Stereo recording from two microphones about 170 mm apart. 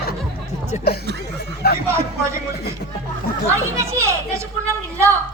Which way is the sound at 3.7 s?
15° right (ahead or behind).